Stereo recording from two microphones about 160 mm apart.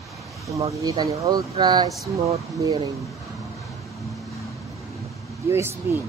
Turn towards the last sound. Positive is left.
turn(degrees=-15)  # may be behind; listen again after turning